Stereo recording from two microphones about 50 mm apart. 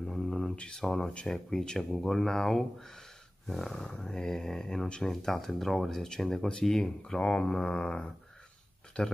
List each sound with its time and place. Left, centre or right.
0.0 s mantra: centre
0.6 s speech: centre
0.8 s speech: centre